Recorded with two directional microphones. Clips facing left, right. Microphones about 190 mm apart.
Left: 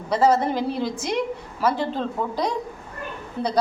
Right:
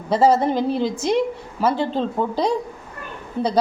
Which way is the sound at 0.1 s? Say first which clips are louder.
Right 3 dB; 30° right (ahead or behind).